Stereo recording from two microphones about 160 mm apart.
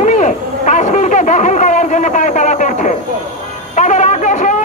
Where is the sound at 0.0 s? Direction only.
50° left (ahead or behind).